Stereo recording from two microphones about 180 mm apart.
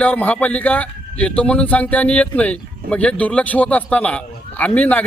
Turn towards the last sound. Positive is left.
turn(degrees=5)  # may be behind; listen again after turning